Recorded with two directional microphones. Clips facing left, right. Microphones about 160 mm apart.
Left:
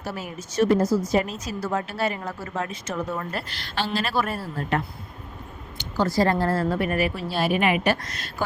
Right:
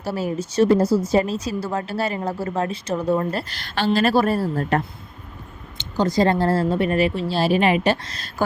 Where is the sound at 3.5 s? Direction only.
50° right (ahead or behind).